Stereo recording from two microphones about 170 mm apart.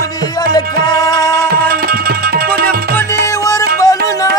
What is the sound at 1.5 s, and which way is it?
Music, 65° right (ahead or behind).